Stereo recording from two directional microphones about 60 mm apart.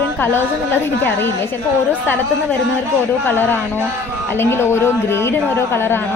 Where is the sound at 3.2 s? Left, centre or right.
Left.